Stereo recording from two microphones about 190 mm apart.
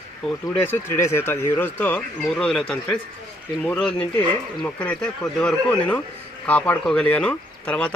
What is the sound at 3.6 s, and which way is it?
Speech, 5° left (ahead or behind).